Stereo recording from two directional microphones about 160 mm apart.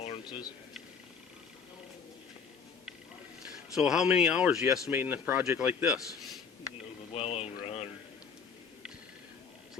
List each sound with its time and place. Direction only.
0.3 s a man's voice: 25° left (ahead or behind)
3.5 s speech: 5° right (ahead or behind)
7.1 s a sound: 40° left (ahead or behind)